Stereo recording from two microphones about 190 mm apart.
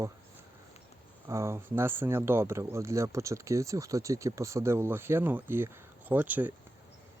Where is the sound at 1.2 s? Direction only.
15° right (ahead or behind).